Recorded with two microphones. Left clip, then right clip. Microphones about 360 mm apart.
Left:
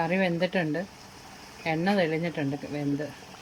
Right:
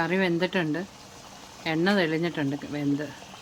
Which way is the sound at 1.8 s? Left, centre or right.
Centre.